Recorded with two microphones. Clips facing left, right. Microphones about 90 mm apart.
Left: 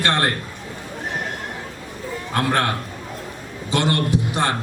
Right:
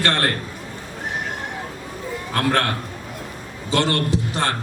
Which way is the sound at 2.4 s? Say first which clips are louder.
Even; 15° left (ahead or behind).